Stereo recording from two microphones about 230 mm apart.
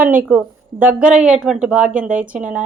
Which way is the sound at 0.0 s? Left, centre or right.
Centre.